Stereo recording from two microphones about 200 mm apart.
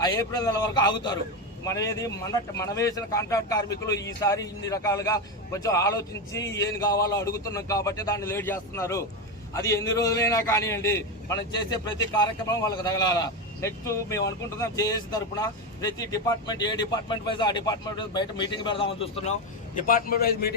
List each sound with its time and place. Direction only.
0.0 s a man's voice: 15° left (ahead or behind); by 20.5 s 50° left (ahead or behind)